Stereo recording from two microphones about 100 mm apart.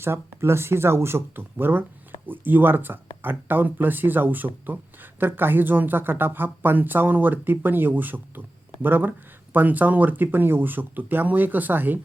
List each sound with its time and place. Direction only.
0.0 s speech: 25° right (ahead or behind)